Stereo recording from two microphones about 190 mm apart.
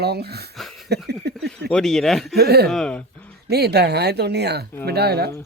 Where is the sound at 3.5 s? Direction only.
60° right (ahead or behind).